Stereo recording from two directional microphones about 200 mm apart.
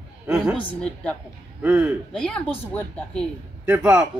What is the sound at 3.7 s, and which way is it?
Speech, 5° right (ahead or behind).